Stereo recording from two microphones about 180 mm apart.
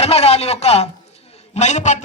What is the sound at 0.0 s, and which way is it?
Speech, 35° left (ahead or behind).